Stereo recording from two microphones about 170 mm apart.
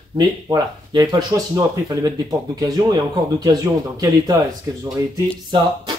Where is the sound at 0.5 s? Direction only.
25° right (ahead or behind).